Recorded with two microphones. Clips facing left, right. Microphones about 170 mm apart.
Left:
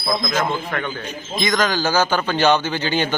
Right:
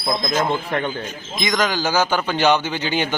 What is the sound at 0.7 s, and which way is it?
Speech, 30° right (ahead or behind).